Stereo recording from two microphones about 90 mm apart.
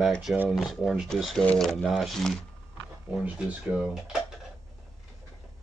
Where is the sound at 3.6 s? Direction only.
5° right (ahead or behind).